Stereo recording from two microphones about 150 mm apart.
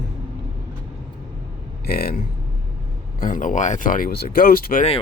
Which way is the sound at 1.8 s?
90° left.